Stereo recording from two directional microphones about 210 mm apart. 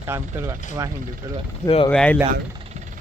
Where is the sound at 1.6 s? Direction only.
25° left (ahead or behind).